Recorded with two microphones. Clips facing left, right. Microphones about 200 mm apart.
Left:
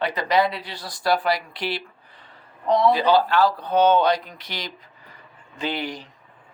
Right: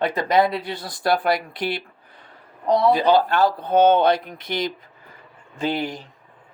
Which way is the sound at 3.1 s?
50° right (ahead or behind).